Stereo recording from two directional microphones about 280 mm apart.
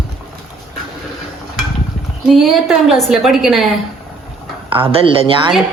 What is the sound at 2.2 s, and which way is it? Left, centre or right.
A woman's voice, centre.